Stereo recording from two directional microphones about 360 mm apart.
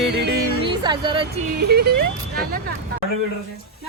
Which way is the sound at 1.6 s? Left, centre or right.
Right.